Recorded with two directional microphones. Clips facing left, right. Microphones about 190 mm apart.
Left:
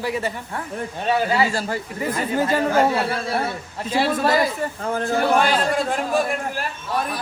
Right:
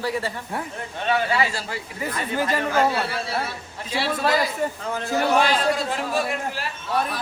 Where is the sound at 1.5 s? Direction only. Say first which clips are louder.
Left 6 dB; 45° left (ahead or behind).